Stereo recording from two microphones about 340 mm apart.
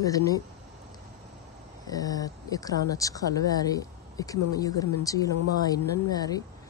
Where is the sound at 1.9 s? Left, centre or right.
Centre.